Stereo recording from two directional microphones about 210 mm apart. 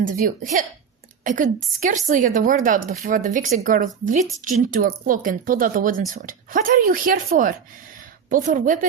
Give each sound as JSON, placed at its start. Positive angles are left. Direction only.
{"t": 0.0, "sound": "speech", "side_deg": -40}